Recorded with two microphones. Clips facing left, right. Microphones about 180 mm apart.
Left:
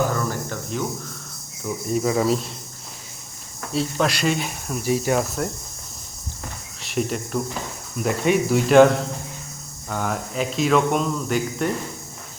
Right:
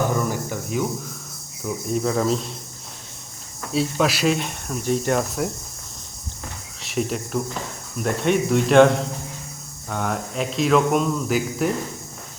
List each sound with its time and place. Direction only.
0.1 s cricket: 15° right (ahead or behind)
1.6 s speech: centre (ahead or behind)
3.7 s speech: centre (ahead or behind)
6.8 s speech: centre (ahead or behind)